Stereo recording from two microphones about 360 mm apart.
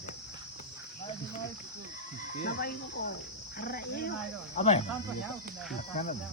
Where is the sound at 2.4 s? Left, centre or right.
Left.